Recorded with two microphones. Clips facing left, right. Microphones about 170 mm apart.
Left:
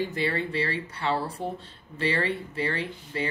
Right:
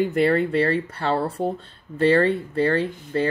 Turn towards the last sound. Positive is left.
turn(degrees=-55)  # may be behind; listen again after turning